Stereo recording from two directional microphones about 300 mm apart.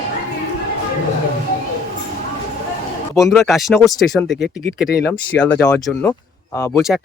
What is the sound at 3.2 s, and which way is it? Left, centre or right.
Speech, centre.